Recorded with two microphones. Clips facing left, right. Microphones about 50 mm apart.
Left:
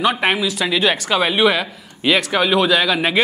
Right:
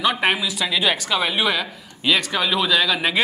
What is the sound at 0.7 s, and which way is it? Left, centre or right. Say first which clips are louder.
Speech: left 3 dB; centre.